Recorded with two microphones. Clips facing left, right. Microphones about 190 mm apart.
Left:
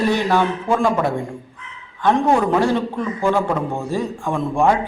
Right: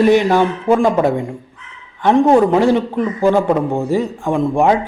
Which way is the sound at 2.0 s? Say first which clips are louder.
Right 5 dB; 20° right (ahead or behind).